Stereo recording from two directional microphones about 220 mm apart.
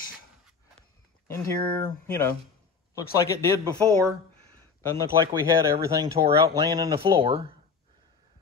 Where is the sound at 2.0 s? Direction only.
10° left (ahead or behind).